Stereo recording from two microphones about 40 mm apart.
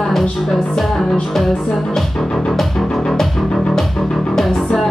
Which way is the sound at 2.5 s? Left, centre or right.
Centre.